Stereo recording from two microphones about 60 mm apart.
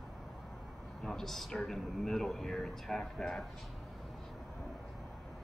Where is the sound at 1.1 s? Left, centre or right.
Centre.